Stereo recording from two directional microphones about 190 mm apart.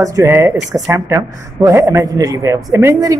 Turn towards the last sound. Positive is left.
turn(degrees=-15)  # may be behind; listen again after turning